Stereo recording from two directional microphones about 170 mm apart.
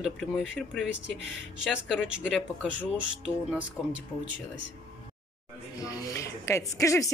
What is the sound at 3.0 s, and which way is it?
Speech, 5° right (ahead or behind).